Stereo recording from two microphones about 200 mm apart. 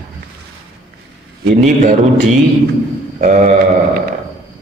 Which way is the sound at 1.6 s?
35° right (ahead or behind).